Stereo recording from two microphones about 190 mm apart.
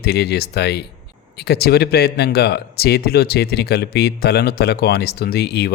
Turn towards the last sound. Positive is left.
turn(degrees=60)  # may be behind; listen again after turning